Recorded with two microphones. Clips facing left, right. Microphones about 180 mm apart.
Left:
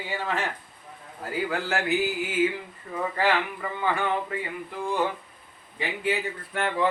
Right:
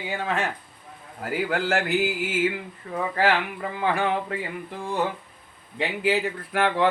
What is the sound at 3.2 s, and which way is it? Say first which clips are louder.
Speech: right 2 dB; 70° right (ahead or behind).